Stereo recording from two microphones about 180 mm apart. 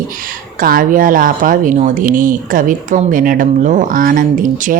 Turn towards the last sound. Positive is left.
turn(degrees=-50)  # may be behind; listen again after turning